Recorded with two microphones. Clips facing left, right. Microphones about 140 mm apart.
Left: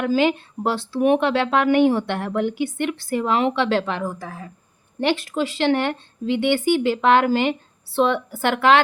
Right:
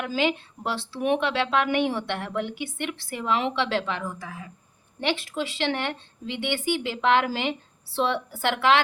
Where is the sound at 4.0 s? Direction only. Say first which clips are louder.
Left 6 dB; 35° left (ahead or behind).